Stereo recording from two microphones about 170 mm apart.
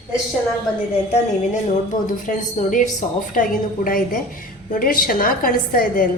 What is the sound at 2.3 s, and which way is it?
A woman's voice, 50° left (ahead or behind).